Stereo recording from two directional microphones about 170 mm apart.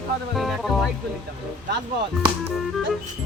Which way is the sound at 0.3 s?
Centre (ahead or behind).